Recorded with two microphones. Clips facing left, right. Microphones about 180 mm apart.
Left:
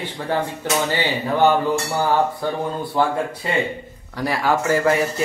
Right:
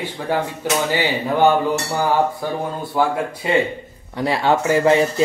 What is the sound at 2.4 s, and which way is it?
Speech, 10° right (ahead or behind).